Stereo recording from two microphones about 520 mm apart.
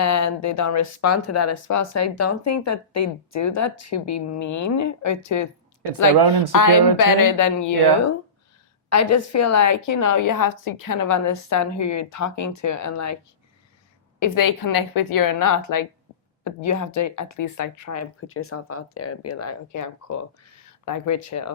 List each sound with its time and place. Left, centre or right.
0.0 s speech: left
6.5 s speech: left
14.2 s speech: left